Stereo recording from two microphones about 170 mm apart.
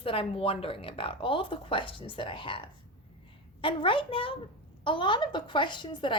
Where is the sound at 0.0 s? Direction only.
30° left (ahead or behind).